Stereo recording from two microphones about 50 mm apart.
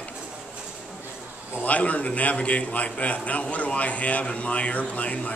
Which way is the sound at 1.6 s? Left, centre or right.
Left.